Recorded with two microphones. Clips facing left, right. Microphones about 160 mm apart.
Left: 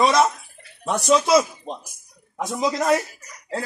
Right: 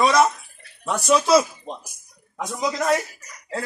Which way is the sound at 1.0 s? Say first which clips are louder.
Even; centre (ahead or behind).